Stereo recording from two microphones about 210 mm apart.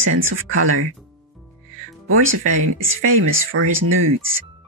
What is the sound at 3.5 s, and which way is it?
Speech, 70° right (ahead or behind).